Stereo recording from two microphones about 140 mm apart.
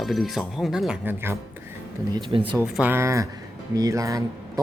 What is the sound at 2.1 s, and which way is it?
Speech, 35° right (ahead or behind).